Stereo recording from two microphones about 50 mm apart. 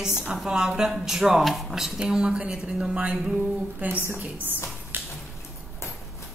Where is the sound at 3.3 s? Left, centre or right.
Right.